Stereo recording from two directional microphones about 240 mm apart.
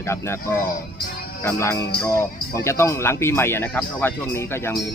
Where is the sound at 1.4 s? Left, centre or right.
Centre.